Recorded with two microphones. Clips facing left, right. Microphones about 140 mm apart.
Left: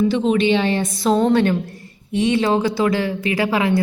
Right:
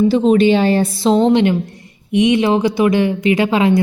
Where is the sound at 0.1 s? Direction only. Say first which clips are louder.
Right 5 dB; 40° right (ahead or behind).